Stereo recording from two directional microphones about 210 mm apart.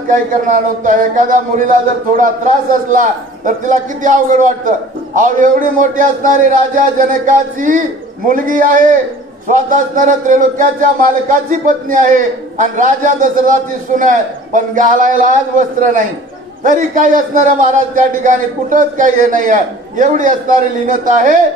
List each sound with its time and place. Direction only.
0.5 s a man's voice: 40° right (ahead or behind)
16.6 s a man's voice: 40° right (ahead or behind)